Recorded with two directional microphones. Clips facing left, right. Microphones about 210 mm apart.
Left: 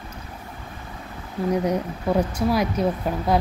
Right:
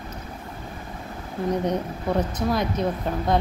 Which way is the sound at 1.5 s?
10° left (ahead or behind).